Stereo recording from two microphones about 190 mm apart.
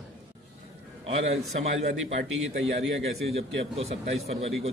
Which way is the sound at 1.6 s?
35° right (ahead or behind).